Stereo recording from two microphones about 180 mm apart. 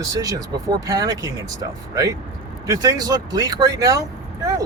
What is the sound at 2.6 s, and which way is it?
Speech, 20° right (ahead or behind).